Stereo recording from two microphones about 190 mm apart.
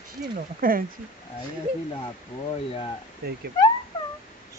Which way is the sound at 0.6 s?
50° right (ahead or behind).